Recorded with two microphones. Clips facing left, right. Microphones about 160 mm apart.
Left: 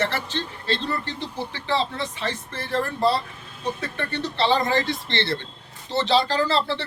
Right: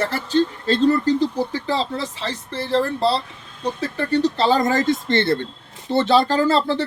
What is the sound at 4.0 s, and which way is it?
Speech, 40° right (ahead or behind).